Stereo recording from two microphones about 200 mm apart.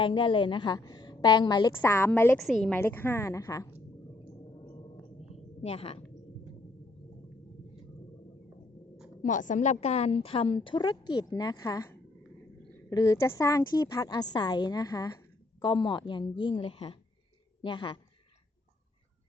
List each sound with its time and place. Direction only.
0.0 s a woman's voice: 25° left (ahead or behind)
2.4 s a woman's voice: centre (ahead or behind)
2.7 s a woman's voice: 10° left (ahead or behind)
5.6 s a woman's voice: 30° left (ahead or behind)
9.2 s a woman's voice: 40° left (ahead or behind); by 18.0 s 25° left (ahead or behind)